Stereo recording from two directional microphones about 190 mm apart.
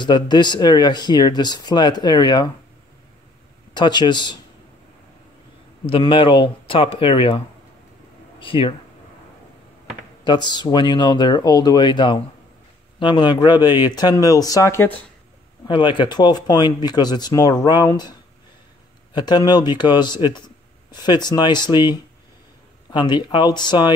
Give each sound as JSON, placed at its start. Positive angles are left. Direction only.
{"t": 0.0, "sound": "speech", "side_deg": 25}
{"t": 3.7, "sound": "speech", "side_deg": 25}
{"t": 5.9, "sound": "speech", "side_deg": 25}
{"t": 10.2, "sound": "speech", "side_deg": 25}
{"t": 15.6, "sound": "speech", "side_deg": 25}
{"t": 19.1, "sound": "speech", "side_deg": 20}